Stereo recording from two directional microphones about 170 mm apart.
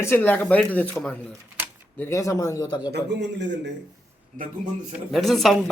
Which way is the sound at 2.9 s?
90° right.